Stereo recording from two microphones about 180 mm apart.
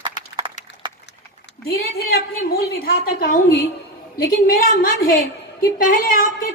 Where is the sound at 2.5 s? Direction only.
60° left (ahead or behind).